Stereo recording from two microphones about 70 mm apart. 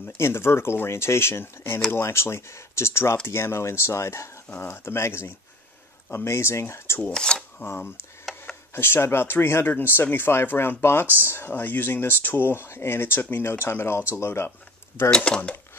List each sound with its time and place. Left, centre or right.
0.0 s speech: left
7.0 s speech: centre
7.6 s speech: left
15.0 s speech: centre